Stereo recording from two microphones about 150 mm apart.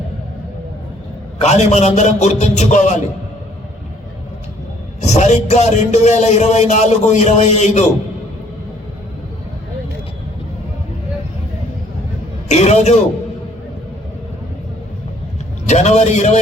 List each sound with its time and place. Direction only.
1.4 s speech: 50° left (ahead or behind)
4.9 s speech: 50° left (ahead or behind)
12.5 s speech: 50° left (ahead or behind)
15.6 s speech: 50° left (ahead or behind)